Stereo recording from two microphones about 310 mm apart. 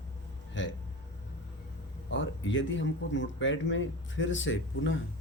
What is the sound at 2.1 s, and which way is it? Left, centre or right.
A man's voice, left.